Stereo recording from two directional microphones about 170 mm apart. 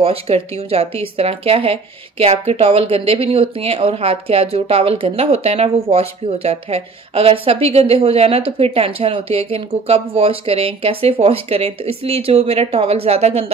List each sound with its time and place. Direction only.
0.0 s a woman's voice: 35° right (ahead or behind)